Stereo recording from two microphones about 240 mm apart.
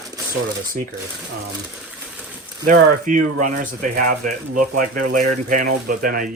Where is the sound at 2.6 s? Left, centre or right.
Right.